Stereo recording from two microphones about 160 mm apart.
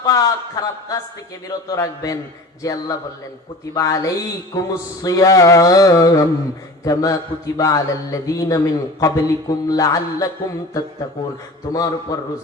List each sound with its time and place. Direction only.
0.0 s a man's voice: 20° left (ahead or behind)